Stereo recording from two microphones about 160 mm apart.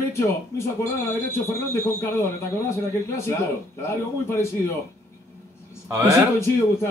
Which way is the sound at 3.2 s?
15° left (ahead or behind).